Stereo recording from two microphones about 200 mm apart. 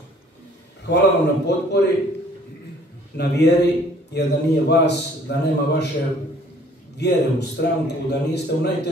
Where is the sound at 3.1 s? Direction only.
55° left (ahead or behind).